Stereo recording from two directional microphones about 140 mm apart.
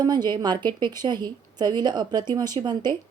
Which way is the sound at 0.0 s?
30° right (ahead or behind).